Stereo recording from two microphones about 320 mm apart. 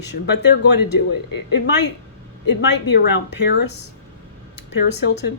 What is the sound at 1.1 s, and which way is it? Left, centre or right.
Speech, left.